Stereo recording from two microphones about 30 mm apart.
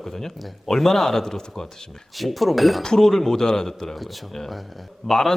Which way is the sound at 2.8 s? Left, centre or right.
Centre.